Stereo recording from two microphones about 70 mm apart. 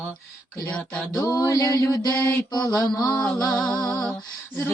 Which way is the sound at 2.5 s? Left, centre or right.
Left.